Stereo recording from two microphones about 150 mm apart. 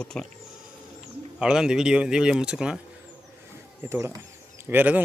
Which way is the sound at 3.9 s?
20° right (ahead or behind).